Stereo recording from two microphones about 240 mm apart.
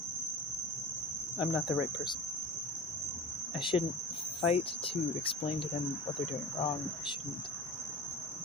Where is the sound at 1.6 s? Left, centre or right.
Centre.